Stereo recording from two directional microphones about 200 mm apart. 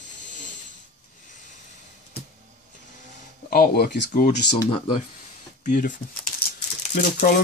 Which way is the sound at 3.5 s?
50° left (ahead or behind).